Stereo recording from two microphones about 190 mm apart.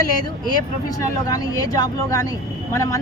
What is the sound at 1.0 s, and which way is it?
Speech, 20° left (ahead or behind).